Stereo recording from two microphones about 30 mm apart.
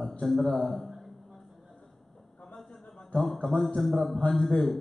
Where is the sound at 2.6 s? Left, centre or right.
Centre.